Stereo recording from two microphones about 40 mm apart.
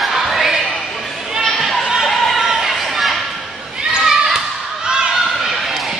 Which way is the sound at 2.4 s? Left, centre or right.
Centre.